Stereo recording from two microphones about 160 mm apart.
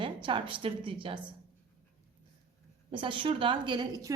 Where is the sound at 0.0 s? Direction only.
30° right (ahead or behind).